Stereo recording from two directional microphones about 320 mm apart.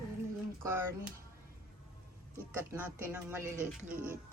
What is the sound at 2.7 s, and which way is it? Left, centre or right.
Speech, centre.